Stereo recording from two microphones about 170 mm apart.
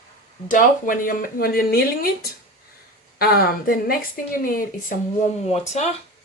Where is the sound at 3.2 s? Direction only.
65° left (ahead or behind).